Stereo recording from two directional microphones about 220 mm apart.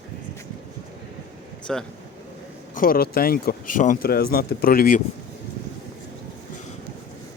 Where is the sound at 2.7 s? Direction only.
40° left (ahead or behind).